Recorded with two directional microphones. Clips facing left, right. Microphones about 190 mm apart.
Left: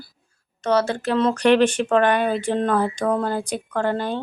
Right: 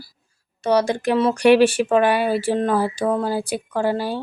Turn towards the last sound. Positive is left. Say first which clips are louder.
# right 1 dB
turn(degrees=-5)  # may be behind; listen again after turning